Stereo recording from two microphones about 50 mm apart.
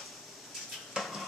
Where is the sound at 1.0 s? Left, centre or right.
Centre.